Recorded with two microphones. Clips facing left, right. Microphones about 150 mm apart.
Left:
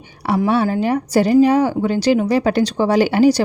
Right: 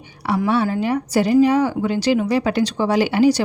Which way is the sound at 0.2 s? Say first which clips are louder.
Left 2 dB; 40° left (ahead or behind).